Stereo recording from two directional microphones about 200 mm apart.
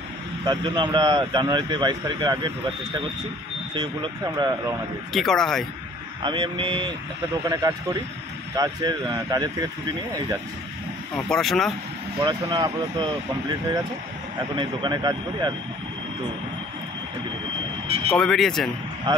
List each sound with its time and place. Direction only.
0.5 s speech: 20° right (ahead or behind)
3.7 s speech: 20° right (ahead or behind)
5.1 s speech: centre (ahead or behind)
6.2 s speech: 25° right (ahead or behind)
11.1 s speech: 5° left (ahead or behind)
12.2 s speech: 20° right (ahead or behind)
14.5 s speech: 25° right (ahead or behind)
17.8 s speech: 30° right (ahead or behind)
18.1 s speech: centre (ahead or behind)